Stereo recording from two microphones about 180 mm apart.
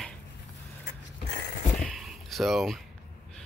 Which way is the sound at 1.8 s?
Centre (ahead or behind).